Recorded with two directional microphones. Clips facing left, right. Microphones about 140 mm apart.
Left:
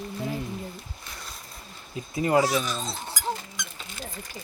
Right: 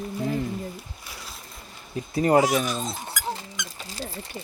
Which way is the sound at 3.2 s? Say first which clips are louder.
Left 1 dB; 30° left (ahead or behind).